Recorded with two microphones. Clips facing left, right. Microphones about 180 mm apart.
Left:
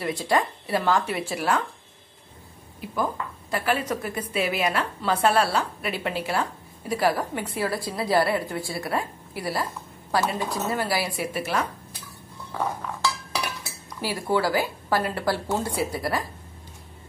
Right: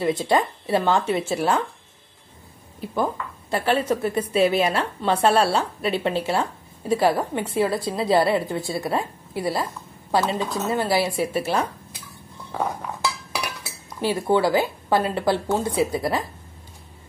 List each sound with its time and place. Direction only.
0.0 s a woman's voice: 25° right (ahead or behind)
3.0 s a woman's voice: 30° right (ahead or behind)
14.0 s a woman's voice: 20° right (ahead or behind)